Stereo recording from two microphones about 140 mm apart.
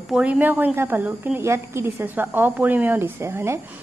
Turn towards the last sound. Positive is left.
turn(degrees=-20)  # may be behind; listen again after turning